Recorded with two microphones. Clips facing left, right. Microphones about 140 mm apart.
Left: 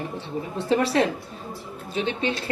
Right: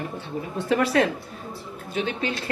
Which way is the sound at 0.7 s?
30° left (ahead or behind).